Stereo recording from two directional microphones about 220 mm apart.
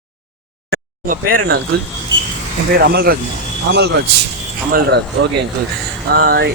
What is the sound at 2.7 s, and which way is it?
Speech, 45° right (ahead or behind).